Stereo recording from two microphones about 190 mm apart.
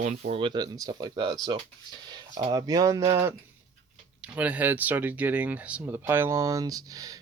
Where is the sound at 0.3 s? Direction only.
25° right (ahead or behind).